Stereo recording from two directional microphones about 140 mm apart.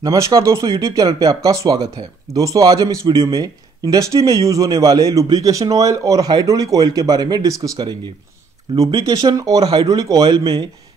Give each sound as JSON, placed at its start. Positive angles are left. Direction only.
{"t": 0.0, "sound": "speech", "side_deg": -25}